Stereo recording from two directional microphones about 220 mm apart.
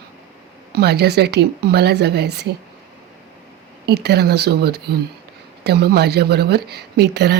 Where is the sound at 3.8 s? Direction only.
45° right (ahead or behind).